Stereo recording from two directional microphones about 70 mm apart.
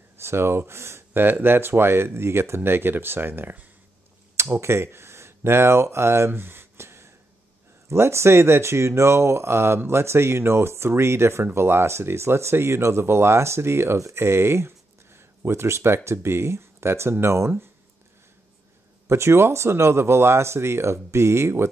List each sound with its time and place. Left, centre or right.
0.2 s speech: right
4.4 s speech: right
19.0 s speech: right